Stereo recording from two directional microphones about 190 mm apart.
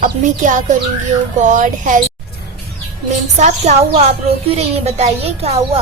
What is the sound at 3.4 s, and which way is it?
Speech, 35° right (ahead or behind).